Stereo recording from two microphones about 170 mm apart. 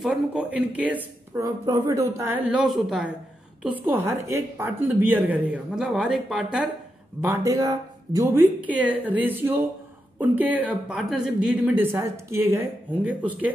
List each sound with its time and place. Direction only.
0.0 s a woman's voice: 5° right (ahead or behind)
3.8 s a woman's voice: 15° right (ahead or behind)
7.2 s a woman's voice: 15° right (ahead or behind)